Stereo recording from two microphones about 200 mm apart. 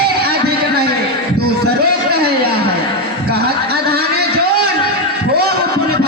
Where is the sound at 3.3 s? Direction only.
50° right (ahead or behind).